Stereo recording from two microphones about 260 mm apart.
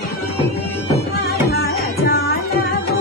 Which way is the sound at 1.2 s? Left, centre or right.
Left.